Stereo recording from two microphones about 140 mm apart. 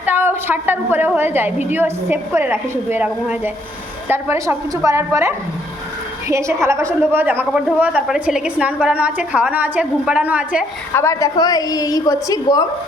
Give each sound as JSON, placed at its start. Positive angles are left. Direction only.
{"t": 0.0, "sound": "a woman's voice", "side_deg": -15}
{"t": 10.9, "sound": "a woman's voice", "side_deg": 20}